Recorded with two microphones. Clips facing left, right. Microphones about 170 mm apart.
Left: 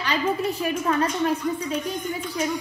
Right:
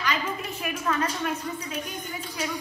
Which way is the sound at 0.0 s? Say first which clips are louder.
Left 6 dB; 35° left (ahead or behind).